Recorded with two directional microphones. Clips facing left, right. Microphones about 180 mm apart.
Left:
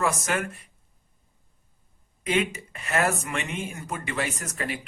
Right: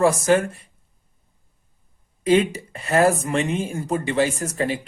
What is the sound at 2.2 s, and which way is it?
Speech, 30° right (ahead or behind).